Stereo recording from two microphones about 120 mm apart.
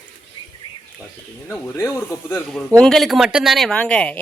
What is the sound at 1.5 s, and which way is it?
Speech, 15° left (ahead or behind).